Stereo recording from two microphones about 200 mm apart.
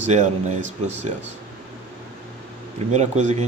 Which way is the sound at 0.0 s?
35° right (ahead or behind).